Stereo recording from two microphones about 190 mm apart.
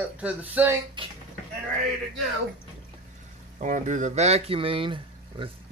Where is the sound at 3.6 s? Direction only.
40° right (ahead or behind).